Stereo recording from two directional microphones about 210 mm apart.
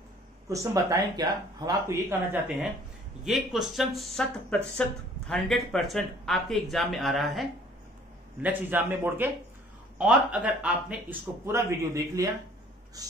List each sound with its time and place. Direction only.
0.5 s speech: 15° right (ahead or behind)
3.3 s a man's voice: centre (ahead or behind)